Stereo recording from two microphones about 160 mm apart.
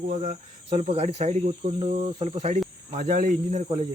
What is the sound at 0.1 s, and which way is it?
Speech, 45° right (ahead or behind).